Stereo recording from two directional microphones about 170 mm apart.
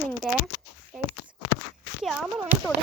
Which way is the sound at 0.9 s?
5° right (ahead or behind).